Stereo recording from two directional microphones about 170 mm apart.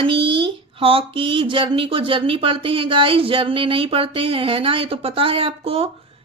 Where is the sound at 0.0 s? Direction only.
30° right (ahead or behind).